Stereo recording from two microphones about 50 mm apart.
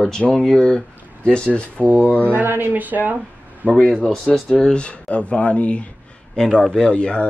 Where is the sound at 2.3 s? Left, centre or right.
Right.